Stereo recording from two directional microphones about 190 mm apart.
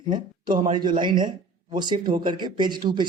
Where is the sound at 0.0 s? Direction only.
25° right (ahead or behind).